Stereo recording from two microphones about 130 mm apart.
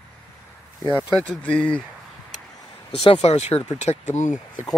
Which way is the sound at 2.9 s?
45° left (ahead or behind).